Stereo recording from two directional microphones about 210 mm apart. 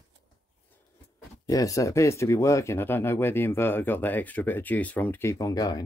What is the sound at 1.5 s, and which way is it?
Speech, 15° left (ahead or behind).